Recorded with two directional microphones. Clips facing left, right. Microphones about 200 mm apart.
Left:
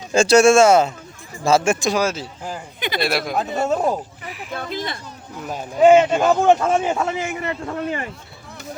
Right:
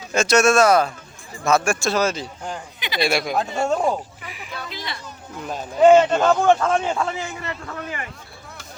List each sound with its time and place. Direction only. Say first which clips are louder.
0.1 s a man's voice: left 4 dB; 30° left (ahead or behind); by 4.5 s centre (ahead or behind)
4.5 s speech: left 6 dB; 50° left (ahead or behind)
5.4 s a man's voice: left 1 dB; 5° left (ahead or behind); by 8.0 s 30° left (ahead or behind)